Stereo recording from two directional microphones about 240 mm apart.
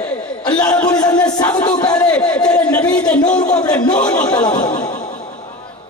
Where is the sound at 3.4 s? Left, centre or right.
Centre.